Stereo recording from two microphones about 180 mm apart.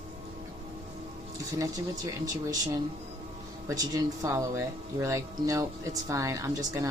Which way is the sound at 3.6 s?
20° right (ahead or behind).